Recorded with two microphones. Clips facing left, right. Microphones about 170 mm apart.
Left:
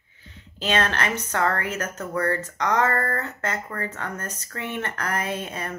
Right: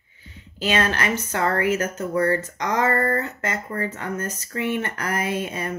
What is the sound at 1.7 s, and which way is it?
Speech, 30° right (ahead or behind).